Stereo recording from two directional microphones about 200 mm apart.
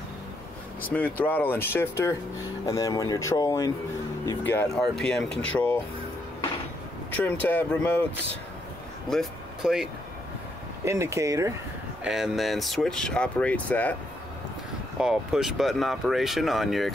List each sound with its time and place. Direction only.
1.2 s speech: 10° left (ahead or behind)
4.5 s speech: 5° left (ahead or behind)
7.4 s speech: 10° left (ahead or behind)
9.1 s speech: centre (ahead or behind)
10.9 s speech: 15° right (ahead or behind)
12.0 s speech: 5° right (ahead or behind)
15.0 s speech: centre (ahead or behind)